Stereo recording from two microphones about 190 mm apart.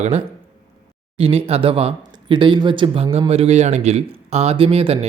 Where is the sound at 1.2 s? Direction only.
30° right (ahead or behind).